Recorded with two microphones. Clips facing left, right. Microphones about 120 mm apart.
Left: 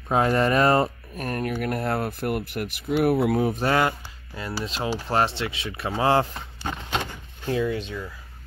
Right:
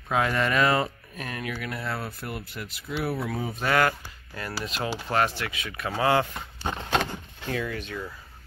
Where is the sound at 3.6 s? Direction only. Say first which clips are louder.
Left 2 dB; 25° left (ahead or behind).